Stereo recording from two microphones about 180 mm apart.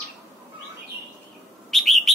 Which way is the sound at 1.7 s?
Centre (ahead or behind).